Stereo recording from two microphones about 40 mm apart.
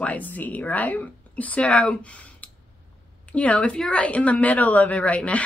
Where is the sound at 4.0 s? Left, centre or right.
Left.